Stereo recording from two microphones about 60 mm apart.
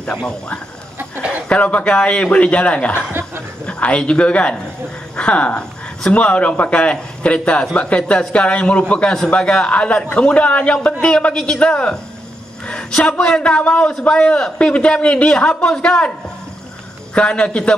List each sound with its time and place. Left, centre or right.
0.0 s a man's voice: centre
3.1 s speech: right
3.6 s a man's voice: centre
17.1 s a man's voice: centre